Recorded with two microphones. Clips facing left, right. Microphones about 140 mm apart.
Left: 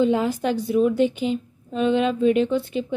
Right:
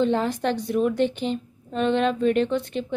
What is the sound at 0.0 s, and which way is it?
A woman's voice, 10° left (ahead or behind).